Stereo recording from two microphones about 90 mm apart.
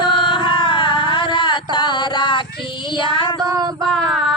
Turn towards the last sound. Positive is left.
turn(degrees=0)  # may be behind; listen again after turning